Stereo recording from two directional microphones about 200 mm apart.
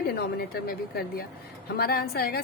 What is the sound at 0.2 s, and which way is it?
A woman's voice, 50° left (ahead or behind).